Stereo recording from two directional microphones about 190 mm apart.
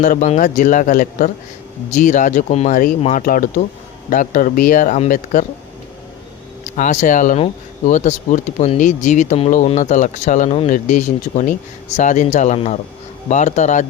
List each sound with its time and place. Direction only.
0.0 s speech: 40° left (ahead or behind)
6.7 s speech: 40° left (ahead or behind)